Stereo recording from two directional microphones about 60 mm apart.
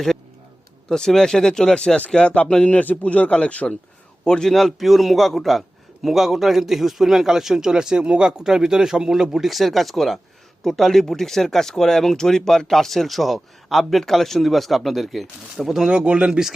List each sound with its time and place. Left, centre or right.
0.9 s a man's voice: centre
4.5 s speech: centre